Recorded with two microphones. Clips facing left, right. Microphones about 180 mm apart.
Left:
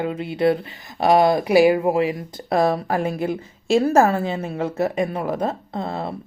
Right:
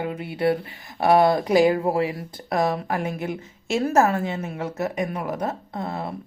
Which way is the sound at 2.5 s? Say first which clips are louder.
Left 4 dB; 30° left (ahead or behind).